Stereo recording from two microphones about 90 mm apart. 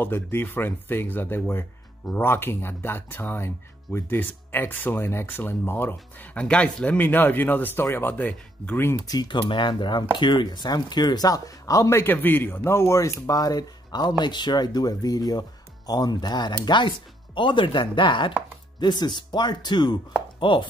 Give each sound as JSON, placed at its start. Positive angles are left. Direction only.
{"t": 0.0, "sound": "speech", "side_deg": 25}
{"t": 6.4, "sound": "speech", "side_deg": 10}
{"t": 9.0, "sound": "speech", "side_deg": 50}
{"t": 12.0, "sound": "speech", "side_deg": 20}
{"t": 18.8, "sound": "speech", "side_deg": 55}